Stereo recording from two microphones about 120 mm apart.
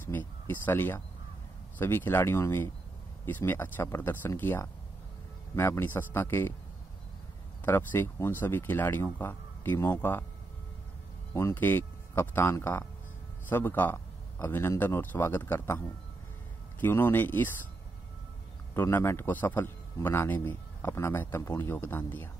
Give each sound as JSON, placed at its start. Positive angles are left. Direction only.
{"t": 0.0, "sound": "a man's voice", "side_deg": 15}
{"t": 7.6, "sound": "speech", "side_deg": 20}
{"t": 11.3, "sound": "a man's voice", "side_deg": 20}
{"t": 16.8, "sound": "speech", "side_deg": 15}
{"t": 18.8, "sound": "a man's voice", "side_deg": 20}